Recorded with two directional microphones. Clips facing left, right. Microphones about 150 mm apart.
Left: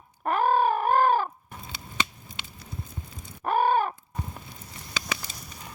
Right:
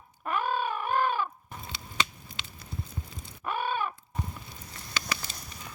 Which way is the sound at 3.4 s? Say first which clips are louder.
Left 8 dB; 45° left (ahead or behind).